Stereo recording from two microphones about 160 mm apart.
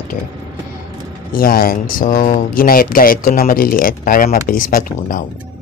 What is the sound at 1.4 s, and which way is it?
Speech, 65° left (ahead or behind).